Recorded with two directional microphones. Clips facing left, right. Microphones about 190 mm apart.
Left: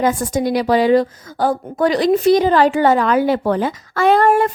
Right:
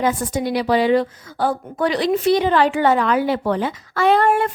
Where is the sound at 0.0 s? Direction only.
45° left (ahead or behind).